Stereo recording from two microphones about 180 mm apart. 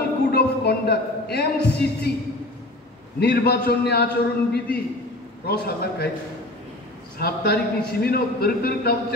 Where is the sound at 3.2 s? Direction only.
60° left (ahead or behind).